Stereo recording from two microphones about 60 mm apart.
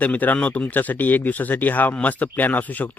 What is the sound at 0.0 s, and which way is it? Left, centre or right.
Speech, left.